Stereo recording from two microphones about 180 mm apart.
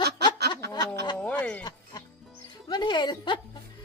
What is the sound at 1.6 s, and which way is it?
Music, 20° left (ahead or behind).